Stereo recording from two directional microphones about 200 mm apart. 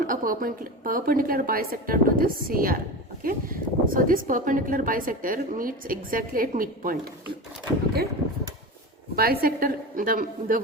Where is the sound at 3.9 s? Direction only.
45° right (ahead or behind).